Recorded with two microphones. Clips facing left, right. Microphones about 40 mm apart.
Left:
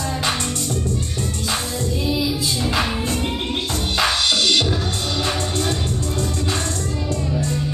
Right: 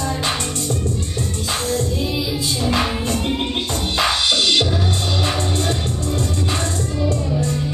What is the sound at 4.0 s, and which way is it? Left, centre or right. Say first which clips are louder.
Music: right 1 dB; centre.